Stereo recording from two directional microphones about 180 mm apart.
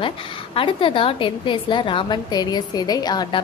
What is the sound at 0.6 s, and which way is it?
A woman's voice, 30° left (ahead or behind).